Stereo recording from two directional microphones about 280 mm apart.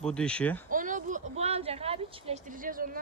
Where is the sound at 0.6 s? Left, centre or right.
Right.